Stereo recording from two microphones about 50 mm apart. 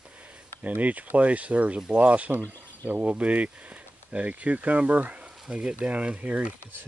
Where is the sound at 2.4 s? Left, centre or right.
Right.